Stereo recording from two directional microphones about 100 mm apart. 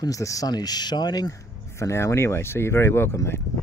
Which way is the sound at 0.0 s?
35° left (ahead or behind).